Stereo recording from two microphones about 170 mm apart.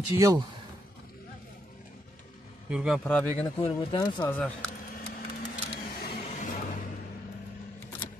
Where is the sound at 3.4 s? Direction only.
30° left (ahead or behind).